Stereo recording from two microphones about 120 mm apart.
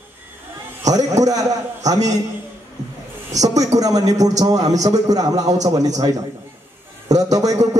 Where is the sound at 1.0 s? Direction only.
30° right (ahead or behind).